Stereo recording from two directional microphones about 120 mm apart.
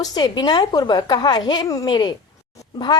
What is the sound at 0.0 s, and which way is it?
Speech, 35° left (ahead or behind).